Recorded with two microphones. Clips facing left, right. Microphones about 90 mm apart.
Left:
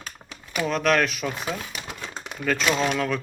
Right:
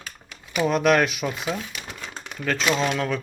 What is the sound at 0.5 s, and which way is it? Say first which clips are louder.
Speech: right 3 dB; 5° right (ahead or behind).